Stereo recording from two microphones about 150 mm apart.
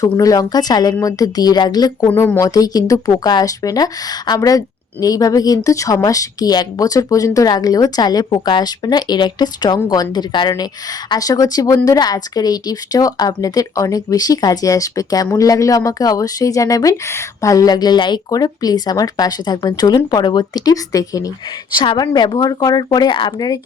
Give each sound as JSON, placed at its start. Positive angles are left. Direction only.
{"t": 0.0, "sound": "a woman's voice", "side_deg": 25}
{"t": 2.0, "sound": "a woman's voice", "side_deg": 15}